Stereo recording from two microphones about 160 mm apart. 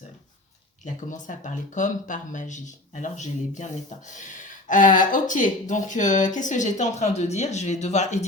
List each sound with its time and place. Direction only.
0.9 s speech: 50° left (ahead or behind)